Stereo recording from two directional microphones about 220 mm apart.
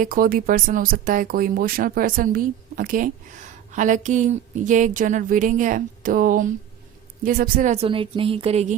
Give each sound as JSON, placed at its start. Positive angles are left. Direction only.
{"t": 0.0, "sound": "speech", "side_deg": -40}